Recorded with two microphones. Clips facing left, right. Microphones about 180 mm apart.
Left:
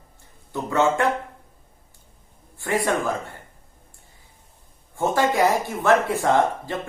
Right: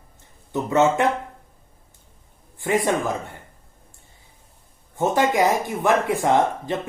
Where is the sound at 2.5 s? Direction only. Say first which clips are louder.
Right 2 dB; 20° right (ahead or behind).